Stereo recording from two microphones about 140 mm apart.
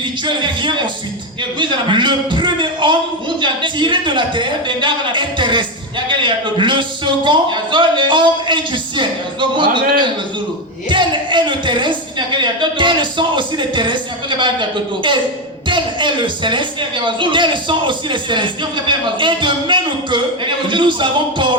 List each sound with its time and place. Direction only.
0.3 s speech: 35° right (ahead or behind)
10.8 s speech: 35° right (ahead or behind)